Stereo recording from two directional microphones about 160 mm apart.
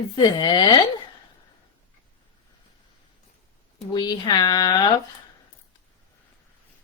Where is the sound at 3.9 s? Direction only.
30° left (ahead or behind).